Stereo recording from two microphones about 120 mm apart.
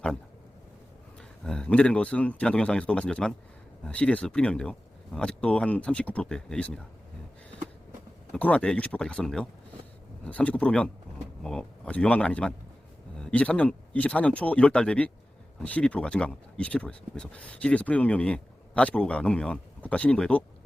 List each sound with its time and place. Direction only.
1.5 s speech: 10° left (ahead or behind)
8.3 s speech: 10° left (ahead or behind)